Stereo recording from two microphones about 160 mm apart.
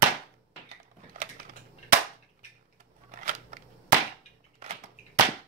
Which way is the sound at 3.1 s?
55° right (ahead or behind).